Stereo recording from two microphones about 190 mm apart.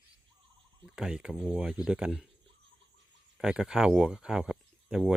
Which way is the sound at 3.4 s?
5° right (ahead or behind).